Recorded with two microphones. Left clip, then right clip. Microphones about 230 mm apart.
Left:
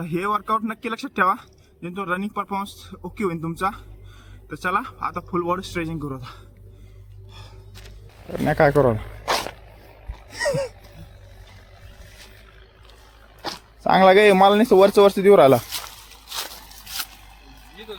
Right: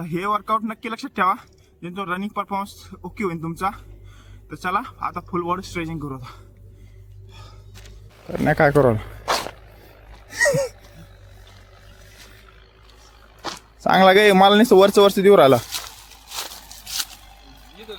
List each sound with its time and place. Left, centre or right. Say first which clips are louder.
0.0 s speech: even; centre
7.3 s gasp: left 1 dB; centre
8.3 s speech: right 1 dB; centre
9.2 s a sound: even; centre
10.2 s a sound: right 5 dB; right
13.8 s speech: even; right